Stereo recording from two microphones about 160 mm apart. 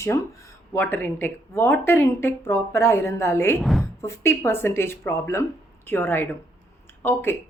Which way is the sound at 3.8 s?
15° left (ahead or behind).